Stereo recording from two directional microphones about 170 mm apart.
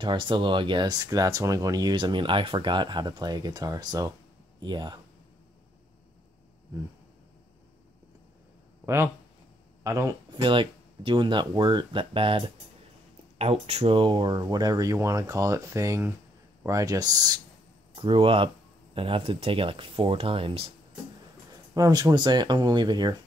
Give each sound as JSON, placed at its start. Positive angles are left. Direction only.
{"t": 0.0, "sound": "speech", "side_deg": -30}
{"t": 8.8, "sound": "speech", "side_deg": -15}
{"t": 21.7, "sound": "speech", "side_deg": -20}